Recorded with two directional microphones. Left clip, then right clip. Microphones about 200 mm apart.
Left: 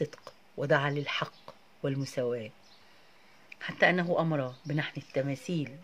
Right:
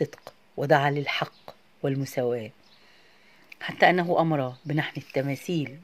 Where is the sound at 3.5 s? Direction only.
25° right (ahead or behind).